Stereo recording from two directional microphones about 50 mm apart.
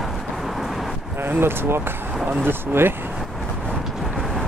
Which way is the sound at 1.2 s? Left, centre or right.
Right.